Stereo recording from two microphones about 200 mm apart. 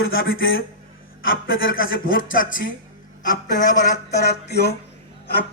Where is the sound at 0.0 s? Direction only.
80° left.